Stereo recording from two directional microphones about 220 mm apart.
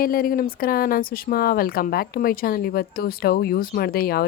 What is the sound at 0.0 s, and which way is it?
Speech, 40° left (ahead or behind).